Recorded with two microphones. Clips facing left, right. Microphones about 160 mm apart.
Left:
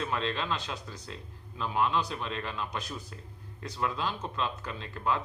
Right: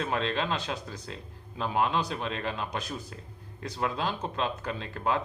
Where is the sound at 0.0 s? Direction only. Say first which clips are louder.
Right 3 dB; 55° right (ahead or behind).